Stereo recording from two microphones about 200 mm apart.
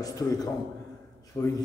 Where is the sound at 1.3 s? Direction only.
15° left (ahead or behind).